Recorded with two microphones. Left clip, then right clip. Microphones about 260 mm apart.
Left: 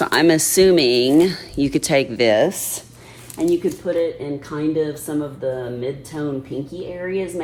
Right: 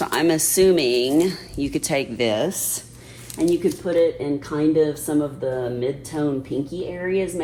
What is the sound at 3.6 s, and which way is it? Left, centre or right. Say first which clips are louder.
Speech: right 1 dB; centre.